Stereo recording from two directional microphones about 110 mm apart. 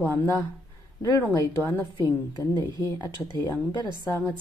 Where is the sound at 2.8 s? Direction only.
35° left (ahead or behind).